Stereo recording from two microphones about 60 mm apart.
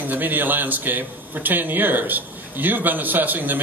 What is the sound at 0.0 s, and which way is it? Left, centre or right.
A man's voice, right.